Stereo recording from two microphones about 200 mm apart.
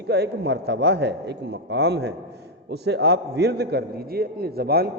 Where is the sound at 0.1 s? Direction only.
55° right (ahead or behind).